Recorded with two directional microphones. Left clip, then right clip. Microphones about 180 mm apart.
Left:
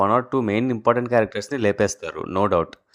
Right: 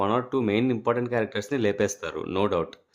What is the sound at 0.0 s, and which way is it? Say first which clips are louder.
Speech: left 5 dB; 25° left (ahead or behind).